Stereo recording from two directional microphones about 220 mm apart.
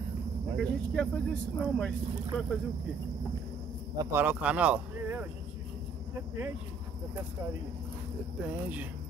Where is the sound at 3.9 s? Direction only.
15° right (ahead or behind).